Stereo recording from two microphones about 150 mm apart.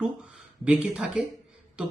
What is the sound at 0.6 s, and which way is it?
Speech, 5° right (ahead or behind).